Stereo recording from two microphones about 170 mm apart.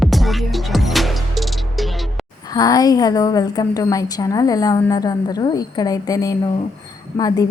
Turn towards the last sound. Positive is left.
turn(degrees=20)  # may be behind; listen again after turning